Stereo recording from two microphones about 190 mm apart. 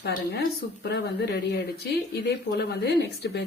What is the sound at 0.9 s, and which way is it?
Speech, 60° left (ahead or behind).